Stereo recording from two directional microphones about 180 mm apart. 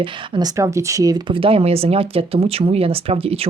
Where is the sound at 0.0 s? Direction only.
20° right (ahead or behind).